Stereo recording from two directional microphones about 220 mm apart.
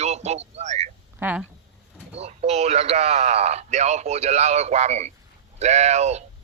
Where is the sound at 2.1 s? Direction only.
30° right (ahead or behind).